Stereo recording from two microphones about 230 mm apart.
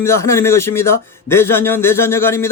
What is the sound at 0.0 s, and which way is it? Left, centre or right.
A man's voice, centre.